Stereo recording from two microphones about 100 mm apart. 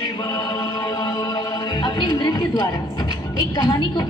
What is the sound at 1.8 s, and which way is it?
Music, 45° left (ahead or behind).